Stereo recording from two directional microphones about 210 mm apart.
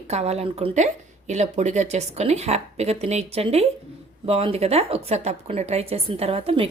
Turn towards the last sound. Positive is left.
turn(degrees=-25)  # may be behind; listen again after turning